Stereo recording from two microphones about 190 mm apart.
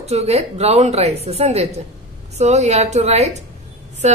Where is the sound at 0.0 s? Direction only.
35° right (ahead or behind).